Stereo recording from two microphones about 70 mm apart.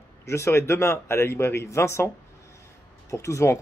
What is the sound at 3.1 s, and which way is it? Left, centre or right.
Speech, left.